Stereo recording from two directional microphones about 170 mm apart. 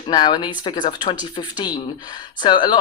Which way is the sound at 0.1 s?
25° left (ahead or behind).